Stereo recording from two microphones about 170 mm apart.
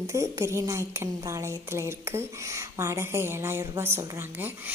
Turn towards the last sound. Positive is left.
turn(degrees=-15)  # may be behind; listen again after turning